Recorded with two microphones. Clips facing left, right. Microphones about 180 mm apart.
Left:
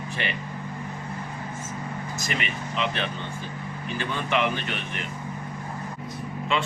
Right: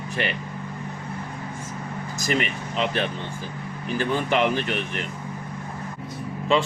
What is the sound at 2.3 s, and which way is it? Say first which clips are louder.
Speech: right 5 dB; 45° right (ahead or behind).